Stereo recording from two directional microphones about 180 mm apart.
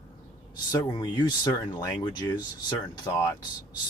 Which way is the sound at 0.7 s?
20° left (ahead or behind).